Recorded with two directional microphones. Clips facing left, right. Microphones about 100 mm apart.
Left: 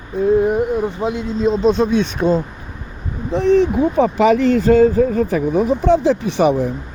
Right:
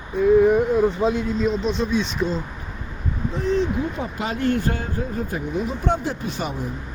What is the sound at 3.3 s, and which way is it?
Speech, 70° left (ahead or behind).